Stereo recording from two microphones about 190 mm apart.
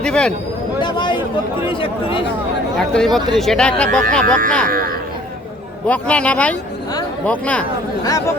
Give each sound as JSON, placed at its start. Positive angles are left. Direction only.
{"t": 0.0, "sound": "chatter", "side_deg": 5}
{"t": 0.8, "sound": "a sound", "side_deg": 25}
{"t": 1.6, "sound": "speech", "side_deg": 30}
{"t": 2.7, "sound": "speech", "side_deg": 5}
{"t": 4.7, "sound": "speech", "side_deg": -50}
{"t": 5.9, "sound": "speech", "side_deg": 5}